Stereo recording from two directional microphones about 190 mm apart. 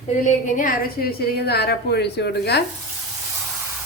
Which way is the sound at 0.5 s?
50° left (ahead or behind).